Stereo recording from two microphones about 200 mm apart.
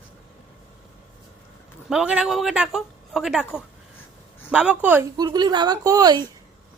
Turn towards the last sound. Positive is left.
turn(degrees=-20)  # may be behind; listen again after turning